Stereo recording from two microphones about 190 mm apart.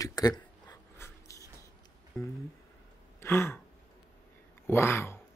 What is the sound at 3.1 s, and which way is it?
Gasp, 10° left (ahead or behind).